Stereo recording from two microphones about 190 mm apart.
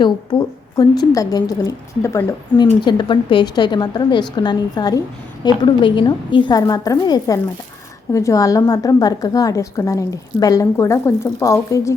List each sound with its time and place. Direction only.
0.0 s a woman's voice: 20° left (ahead or behind)